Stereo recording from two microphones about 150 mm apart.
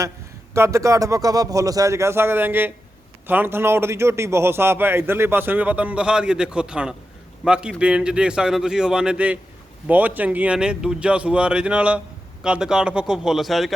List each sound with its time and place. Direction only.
0.5 s a man's voice: 20° right (ahead or behind); by 13.7 s centre (ahead or behind)